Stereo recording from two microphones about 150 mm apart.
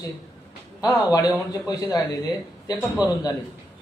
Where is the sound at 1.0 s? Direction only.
25° left (ahead or behind).